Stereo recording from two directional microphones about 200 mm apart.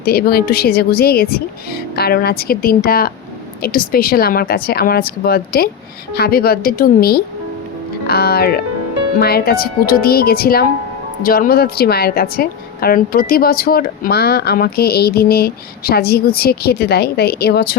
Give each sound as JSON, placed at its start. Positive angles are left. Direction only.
{"t": 0.0, "sound": "a woman's voice", "side_deg": 50}